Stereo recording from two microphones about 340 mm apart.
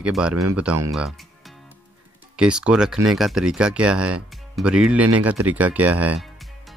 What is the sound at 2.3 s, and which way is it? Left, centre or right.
Speech, centre.